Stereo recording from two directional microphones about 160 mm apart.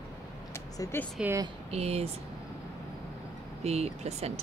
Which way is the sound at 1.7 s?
40° right (ahead or behind).